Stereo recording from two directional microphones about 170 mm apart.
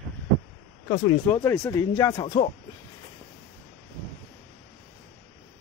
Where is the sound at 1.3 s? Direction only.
10° left (ahead or behind).